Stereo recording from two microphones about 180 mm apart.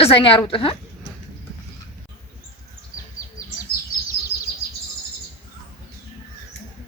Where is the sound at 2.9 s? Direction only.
20° left (ahead or behind).